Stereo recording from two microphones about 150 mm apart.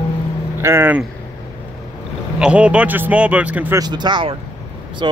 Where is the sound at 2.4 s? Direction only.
10° right (ahead or behind).